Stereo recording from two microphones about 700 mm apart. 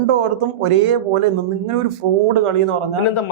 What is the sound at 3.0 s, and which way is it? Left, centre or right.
Speech, left.